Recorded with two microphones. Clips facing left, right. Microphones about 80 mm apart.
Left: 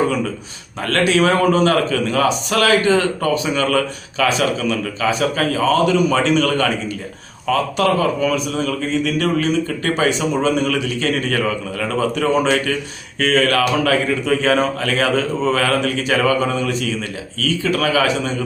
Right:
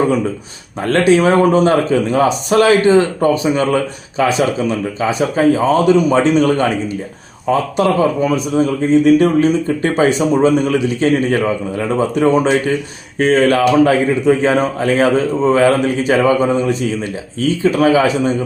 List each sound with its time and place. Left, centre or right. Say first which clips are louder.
0.8 s a man's voice: right 4 dB; right